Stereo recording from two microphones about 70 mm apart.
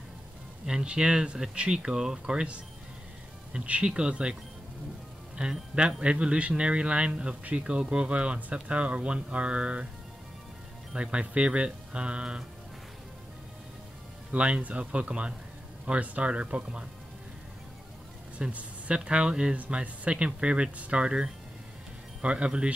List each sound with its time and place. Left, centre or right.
0.7 s speech: centre
3.5 s speech: centre
5.4 s speech: centre
10.9 s speech: centre
14.3 s speech: centre
18.4 s speech: centre